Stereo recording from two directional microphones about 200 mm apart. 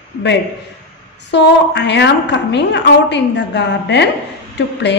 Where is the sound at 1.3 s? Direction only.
60° left (ahead or behind).